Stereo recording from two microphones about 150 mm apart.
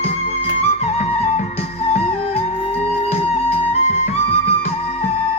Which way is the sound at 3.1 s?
45° left (ahead or behind).